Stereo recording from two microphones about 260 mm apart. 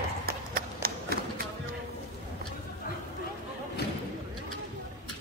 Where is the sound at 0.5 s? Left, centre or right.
Right.